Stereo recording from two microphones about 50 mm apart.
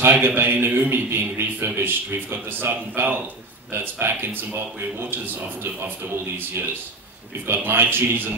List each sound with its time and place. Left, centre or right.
0.1 s speech: right